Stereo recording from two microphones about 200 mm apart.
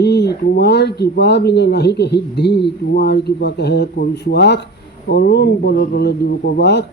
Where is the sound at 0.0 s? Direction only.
55° left (ahead or behind).